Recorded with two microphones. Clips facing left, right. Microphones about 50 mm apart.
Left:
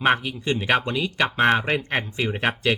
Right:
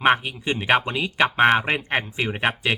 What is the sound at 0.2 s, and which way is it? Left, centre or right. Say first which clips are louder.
Speech: left 1 dB; right.